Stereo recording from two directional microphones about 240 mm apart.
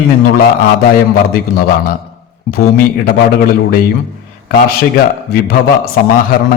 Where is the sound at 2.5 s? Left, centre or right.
Left.